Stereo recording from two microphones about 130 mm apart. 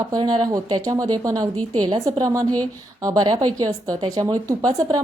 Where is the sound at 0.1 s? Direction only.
30° right (ahead or behind).